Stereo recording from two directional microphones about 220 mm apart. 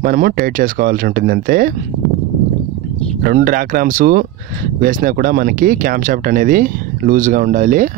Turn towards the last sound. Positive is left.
turn(degrees=-35)  # may be behind; listen again after turning